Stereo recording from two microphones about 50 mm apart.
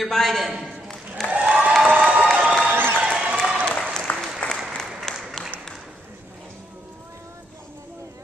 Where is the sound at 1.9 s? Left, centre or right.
Right.